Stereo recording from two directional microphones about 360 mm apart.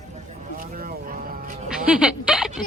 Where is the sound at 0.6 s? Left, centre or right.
Right.